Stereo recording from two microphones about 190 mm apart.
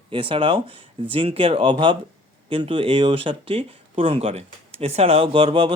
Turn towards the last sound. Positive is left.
turn(degrees=-30)  # may be behind; listen again after turning